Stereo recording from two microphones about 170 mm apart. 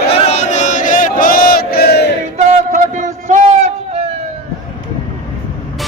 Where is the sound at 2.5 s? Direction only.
45° right (ahead or behind).